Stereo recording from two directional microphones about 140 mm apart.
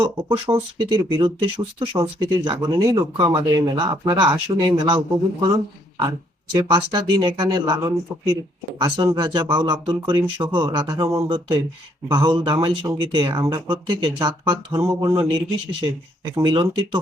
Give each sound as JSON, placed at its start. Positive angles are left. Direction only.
{"t": 0.0, "sound": "speech", "side_deg": -35}
{"t": 6.5, "sound": "speech", "side_deg": -30}
{"t": 15.2, "sound": "speech", "side_deg": -35}